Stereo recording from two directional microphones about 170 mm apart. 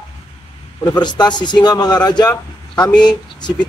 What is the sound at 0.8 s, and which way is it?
A man's voice, 25° left (ahead or behind).